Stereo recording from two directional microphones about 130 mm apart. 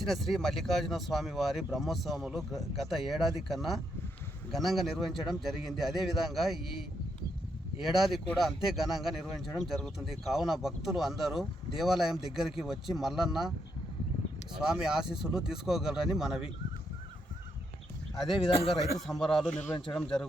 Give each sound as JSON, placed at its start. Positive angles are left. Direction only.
{"t": 0.0, "sound": "speech", "side_deg": 0}
{"t": 7.8, "sound": "speech", "side_deg": 0}
{"t": 14.7, "sound": "speech", "side_deg": -5}
{"t": 18.3, "sound": "speech", "side_deg": 45}
{"t": 18.7, "sound": "speech", "side_deg": 0}